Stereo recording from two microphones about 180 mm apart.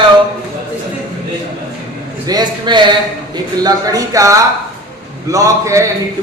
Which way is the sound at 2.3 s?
25° right (ahead or behind).